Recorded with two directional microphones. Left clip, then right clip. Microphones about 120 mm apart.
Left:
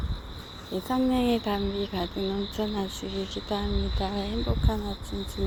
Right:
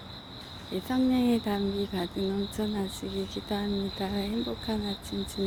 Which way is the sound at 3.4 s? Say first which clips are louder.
Left 1 dB; 25° right (ahead or behind).